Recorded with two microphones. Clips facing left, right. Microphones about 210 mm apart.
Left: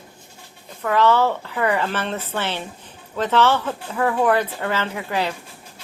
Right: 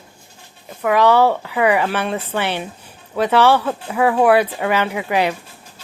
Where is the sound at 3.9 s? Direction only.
85° right.